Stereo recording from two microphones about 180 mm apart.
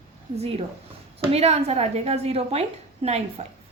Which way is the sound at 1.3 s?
35° right (ahead or behind).